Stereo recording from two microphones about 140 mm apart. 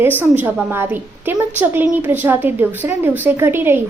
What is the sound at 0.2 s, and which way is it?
A woman's voice, 15° right (ahead or behind).